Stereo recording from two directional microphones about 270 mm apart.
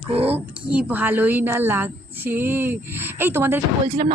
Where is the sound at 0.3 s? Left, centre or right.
Centre.